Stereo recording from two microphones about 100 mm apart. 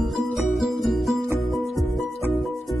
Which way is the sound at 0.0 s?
Centre (ahead or behind).